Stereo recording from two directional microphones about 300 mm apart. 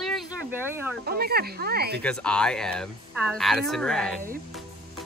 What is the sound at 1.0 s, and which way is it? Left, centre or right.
Speech, right.